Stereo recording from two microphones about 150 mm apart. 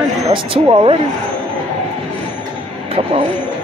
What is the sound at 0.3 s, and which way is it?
Speech, 35° right (ahead or behind).